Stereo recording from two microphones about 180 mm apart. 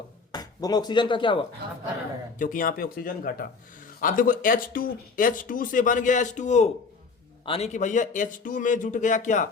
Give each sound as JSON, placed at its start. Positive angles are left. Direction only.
{"t": 0.3, "sound": "speech", "side_deg": 20}
{"t": 2.4, "sound": "speech", "side_deg": 50}